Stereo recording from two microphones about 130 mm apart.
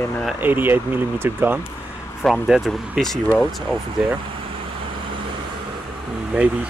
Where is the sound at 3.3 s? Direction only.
5° right (ahead or behind).